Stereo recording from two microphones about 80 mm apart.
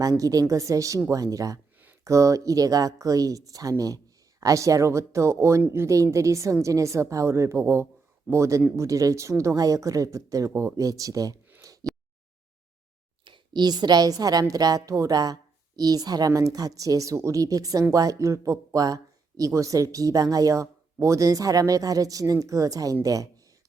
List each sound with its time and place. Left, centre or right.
0.0 s a woman's voice: right
10.5 s speech: right
10.8 s speech: right
11.6 s a sound: right
13.2 s speech: right